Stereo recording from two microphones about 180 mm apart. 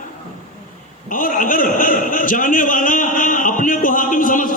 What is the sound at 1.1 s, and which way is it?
A man's voice, 50° left (ahead or behind).